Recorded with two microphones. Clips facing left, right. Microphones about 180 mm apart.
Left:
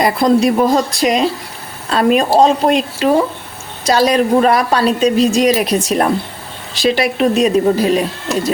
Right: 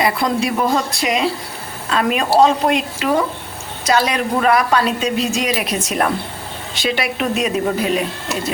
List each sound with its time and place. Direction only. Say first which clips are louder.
0.0 s a woman's voice: left 6 dB; 35° left (ahead or behind)